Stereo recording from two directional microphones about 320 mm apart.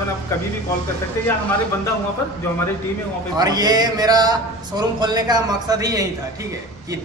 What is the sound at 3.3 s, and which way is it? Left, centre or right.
A man's voice, centre.